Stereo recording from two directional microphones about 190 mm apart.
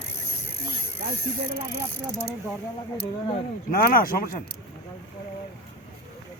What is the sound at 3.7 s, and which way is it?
Speech, 50° left (ahead or behind).